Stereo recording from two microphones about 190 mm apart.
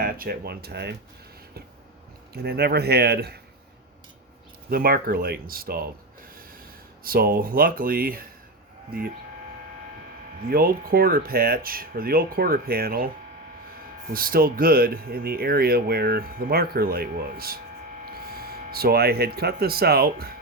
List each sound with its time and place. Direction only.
0.0 s speech: 50° right (ahead or behind)
2.3 s speech: 55° right (ahead or behind)
4.7 s speech: 50° right (ahead or behind)
7.0 s speech: 50° right (ahead or behind)
10.5 s speech: 50° right (ahead or behind)
14.1 s speech: 50° right (ahead or behind)